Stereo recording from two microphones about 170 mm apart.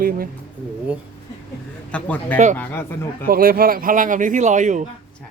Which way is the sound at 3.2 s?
60° right (ahead or behind).